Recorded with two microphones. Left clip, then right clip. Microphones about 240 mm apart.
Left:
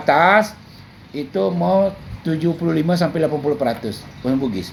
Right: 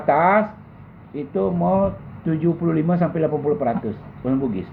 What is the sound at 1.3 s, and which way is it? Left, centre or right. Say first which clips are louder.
Speech: left 2 dB; left.